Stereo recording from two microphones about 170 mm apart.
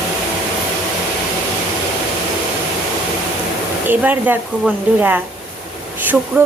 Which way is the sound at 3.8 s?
10° right (ahead or behind).